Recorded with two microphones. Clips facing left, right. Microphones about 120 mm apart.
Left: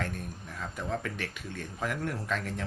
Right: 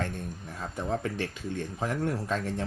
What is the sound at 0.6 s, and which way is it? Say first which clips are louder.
Speech: right 3 dB; 30° right (ahead or behind).